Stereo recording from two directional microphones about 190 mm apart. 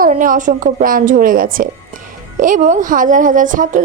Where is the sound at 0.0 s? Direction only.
45° right (ahead or behind).